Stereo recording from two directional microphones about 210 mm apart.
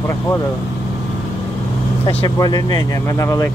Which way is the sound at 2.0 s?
20° left (ahead or behind).